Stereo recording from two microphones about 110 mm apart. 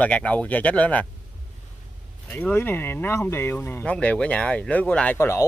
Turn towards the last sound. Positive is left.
turn(degrees=25)  # may be behind; listen again after turning